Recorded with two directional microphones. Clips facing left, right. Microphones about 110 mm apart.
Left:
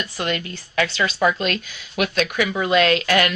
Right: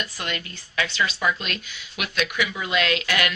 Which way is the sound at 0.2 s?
35° left (ahead or behind).